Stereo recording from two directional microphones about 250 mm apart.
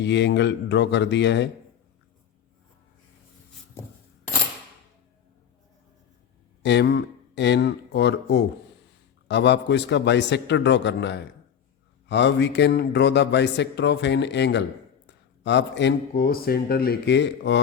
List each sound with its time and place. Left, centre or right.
0.0 s speech: left
6.6 s speech: left